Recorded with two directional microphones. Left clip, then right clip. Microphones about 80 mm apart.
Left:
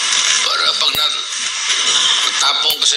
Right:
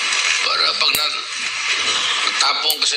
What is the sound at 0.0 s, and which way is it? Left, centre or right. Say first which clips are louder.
Speech: left 3 dB; left.